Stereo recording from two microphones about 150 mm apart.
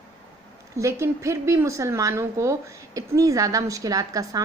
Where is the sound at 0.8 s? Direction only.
20° right (ahead or behind).